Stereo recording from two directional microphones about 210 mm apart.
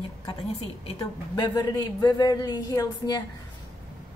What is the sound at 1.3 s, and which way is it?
Speech, 20° left (ahead or behind).